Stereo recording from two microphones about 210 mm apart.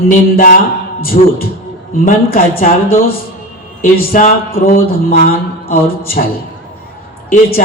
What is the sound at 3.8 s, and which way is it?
Speech, 40° left (ahead or behind).